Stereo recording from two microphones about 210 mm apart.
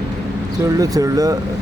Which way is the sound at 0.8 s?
15° right (ahead or behind).